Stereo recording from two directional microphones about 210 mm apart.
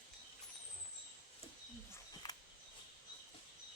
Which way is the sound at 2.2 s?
20° left (ahead or behind).